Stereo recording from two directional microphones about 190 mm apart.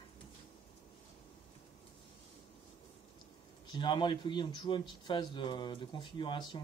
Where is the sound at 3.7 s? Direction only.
25° left (ahead or behind).